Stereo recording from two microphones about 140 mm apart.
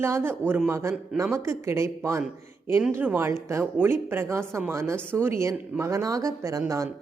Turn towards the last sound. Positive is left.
turn(degrees=-25)  # may be behind; listen again after turning